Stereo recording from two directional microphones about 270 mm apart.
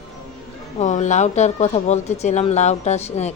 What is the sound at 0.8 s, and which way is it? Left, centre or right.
A woman's voice, left.